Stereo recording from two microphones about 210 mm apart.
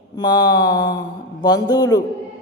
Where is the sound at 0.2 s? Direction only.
20° left (ahead or behind).